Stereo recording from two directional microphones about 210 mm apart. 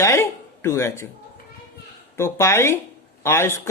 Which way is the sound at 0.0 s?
10° left (ahead or behind).